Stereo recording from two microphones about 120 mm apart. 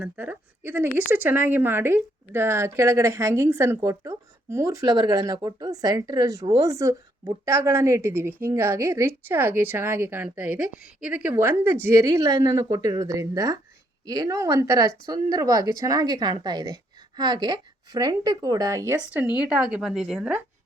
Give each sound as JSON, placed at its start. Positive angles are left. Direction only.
{"t": 0.0, "sound": "speech", "side_deg": -10}
{"t": 19.1, "sound": "a woman's voice", "side_deg": -10}